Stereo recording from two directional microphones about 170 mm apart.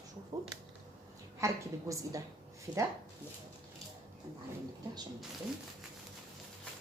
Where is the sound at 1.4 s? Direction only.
20° right (ahead or behind).